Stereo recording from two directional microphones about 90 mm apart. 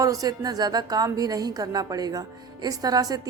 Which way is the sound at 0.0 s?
40° right (ahead or behind).